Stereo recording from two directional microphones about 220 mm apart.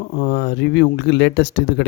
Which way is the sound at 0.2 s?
50° left (ahead or behind).